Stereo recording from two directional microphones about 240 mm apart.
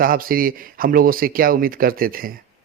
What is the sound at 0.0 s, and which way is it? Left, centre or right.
Speech, right.